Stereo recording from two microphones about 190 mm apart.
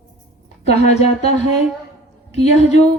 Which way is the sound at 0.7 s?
35° left (ahead or behind).